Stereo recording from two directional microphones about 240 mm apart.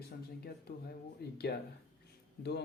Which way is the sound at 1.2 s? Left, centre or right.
Left.